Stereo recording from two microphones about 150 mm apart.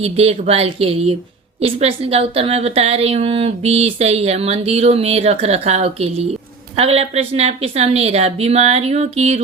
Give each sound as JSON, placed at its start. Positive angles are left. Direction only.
{"t": 0.0, "sound": "speech", "side_deg": -40}